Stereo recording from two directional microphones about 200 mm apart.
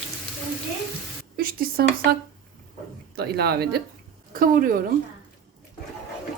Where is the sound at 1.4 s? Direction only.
45° right (ahead or behind).